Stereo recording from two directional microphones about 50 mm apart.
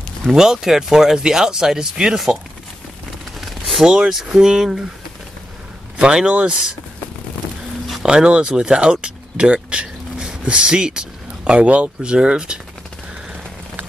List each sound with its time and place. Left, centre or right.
0.3 s speech: centre
3.3 s a sound: centre
3.8 s speech: centre
5.9 s speech: centre
8.0 s speech: centre